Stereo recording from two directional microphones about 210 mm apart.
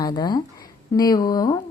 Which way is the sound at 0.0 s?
20° left (ahead or behind).